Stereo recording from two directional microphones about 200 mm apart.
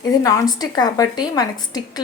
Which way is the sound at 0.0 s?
20° left (ahead or behind).